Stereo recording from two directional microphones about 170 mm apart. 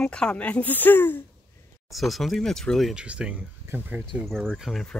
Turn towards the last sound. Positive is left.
turn(degrees=0)  # may be behind; listen again after turning